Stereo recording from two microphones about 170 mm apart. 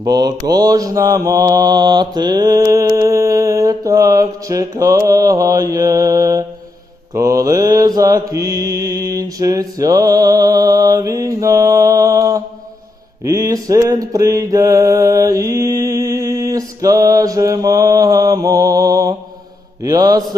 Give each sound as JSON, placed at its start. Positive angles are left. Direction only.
{"t": 0.0, "sound": "mantra", "side_deg": -25}